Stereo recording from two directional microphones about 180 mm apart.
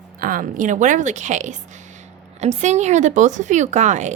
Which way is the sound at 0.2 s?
50° right (ahead or behind).